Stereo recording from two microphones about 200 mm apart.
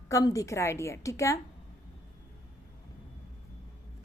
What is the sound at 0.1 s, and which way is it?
A woman's voice, 15° left (ahead or behind).